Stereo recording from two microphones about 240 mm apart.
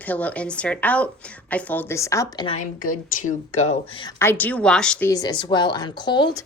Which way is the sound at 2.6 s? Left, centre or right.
Left.